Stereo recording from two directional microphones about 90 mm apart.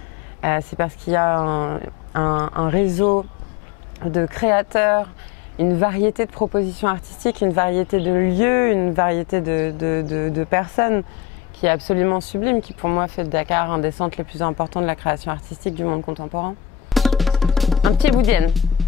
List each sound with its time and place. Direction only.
0.4 s speech: 15° left (ahead or behind)
16.9 s music: centre (ahead or behind)